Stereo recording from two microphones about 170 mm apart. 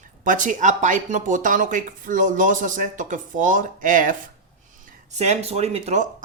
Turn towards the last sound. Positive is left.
turn(degrees=-40)  # may be behind; listen again after turning